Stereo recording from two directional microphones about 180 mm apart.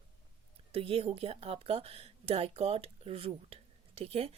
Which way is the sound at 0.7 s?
35° right (ahead or behind).